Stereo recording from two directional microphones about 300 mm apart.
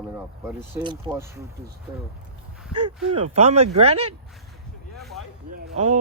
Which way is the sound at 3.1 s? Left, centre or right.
Centre.